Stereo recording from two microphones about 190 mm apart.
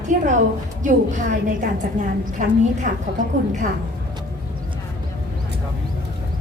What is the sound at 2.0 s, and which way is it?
Speech, 40° right (ahead or behind).